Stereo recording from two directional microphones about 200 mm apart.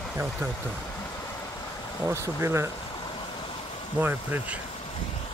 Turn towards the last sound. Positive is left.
turn(degrees=-10)  # may be behind; listen again after turning